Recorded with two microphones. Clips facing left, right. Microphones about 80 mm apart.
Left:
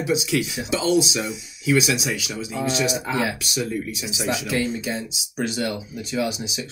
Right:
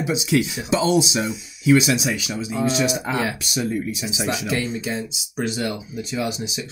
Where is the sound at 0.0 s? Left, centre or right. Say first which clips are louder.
Right 2 dB; right.